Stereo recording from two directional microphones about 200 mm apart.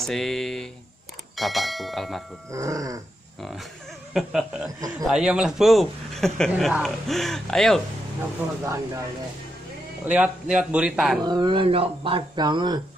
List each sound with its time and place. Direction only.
0.0 s speech: centre (ahead or behind)
2.5 s speech: 15° right (ahead or behind)
4.1 s speech: centre (ahead or behind)
8.6 s speech: 15° right (ahead or behind)
10.0 s speech: 5° right (ahead or behind)
11.2 s speech: 20° right (ahead or behind)